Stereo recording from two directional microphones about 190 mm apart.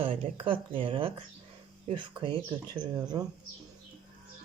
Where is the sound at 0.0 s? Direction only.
30° right (ahead or behind).